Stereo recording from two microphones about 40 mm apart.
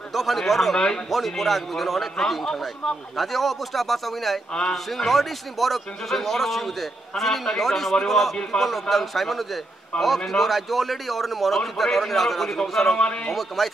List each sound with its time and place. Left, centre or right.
0.1 s a man's voice: centre
13.0 s a man's voice: left
13.3 s a man's voice: centre